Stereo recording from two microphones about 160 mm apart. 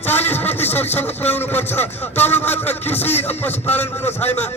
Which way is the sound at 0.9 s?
10° left (ahead or behind).